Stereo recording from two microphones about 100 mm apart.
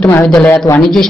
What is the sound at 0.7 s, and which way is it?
Speech, 30° left (ahead or behind).